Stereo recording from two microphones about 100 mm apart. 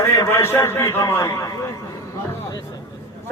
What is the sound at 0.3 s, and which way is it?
A man's voice, 25° left (ahead or behind).